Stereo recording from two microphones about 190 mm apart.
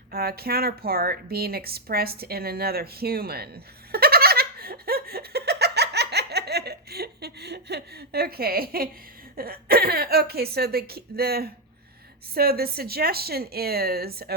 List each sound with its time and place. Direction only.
0.1 s speech: 55° right (ahead or behind)